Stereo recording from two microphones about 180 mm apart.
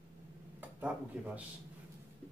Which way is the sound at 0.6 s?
10° right (ahead or behind).